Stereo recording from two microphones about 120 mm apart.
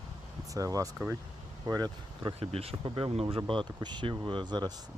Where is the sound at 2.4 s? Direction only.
55° right (ahead or behind).